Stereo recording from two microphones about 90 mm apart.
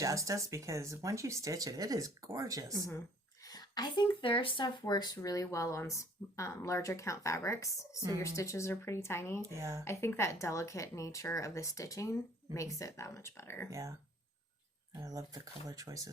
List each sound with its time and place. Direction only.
0.0 s speech: 35° right (ahead or behind)
3.4 s speech: 45° left (ahead or behind); by 9.4 s 30° left (ahead or behind)
9.6 s speech: 35° right (ahead or behind)
9.8 s speech: 30° left (ahead or behind)
13.7 s speech: 40° right (ahead or behind)
14.9 s speech: 40° right (ahead or behind)